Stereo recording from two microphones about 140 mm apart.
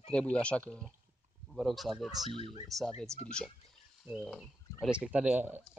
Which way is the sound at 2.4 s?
45° left (ahead or behind).